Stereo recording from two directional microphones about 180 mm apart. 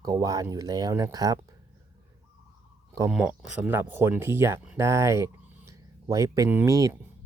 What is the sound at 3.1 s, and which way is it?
Speech, 5° right (ahead or behind).